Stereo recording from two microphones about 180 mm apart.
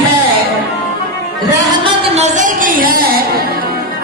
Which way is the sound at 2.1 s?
40° right (ahead or behind).